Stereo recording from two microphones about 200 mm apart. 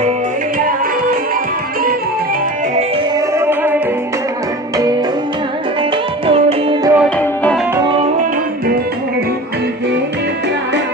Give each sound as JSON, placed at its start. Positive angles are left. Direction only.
{"t": 3.2, "sound": "music", "side_deg": -10}
{"t": 6.2, "sound": "music", "side_deg": -25}
{"t": 7.2, "sound": "music", "side_deg": 5}